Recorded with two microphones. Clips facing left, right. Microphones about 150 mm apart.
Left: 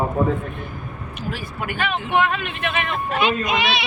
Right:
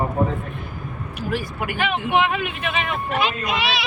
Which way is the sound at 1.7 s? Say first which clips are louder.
Right 1 dB; 15° right (ahead or behind).